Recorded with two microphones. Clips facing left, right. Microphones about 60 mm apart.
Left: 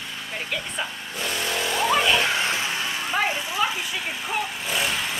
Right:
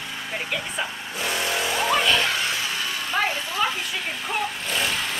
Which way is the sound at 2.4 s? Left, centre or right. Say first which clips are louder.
Left 1 dB; left.